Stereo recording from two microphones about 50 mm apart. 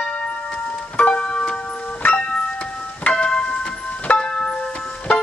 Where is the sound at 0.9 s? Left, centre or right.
Left.